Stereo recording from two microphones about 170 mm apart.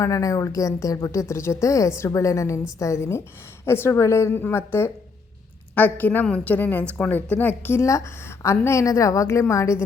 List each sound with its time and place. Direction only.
0.0 s a woman's voice: 20° left (ahead or behind)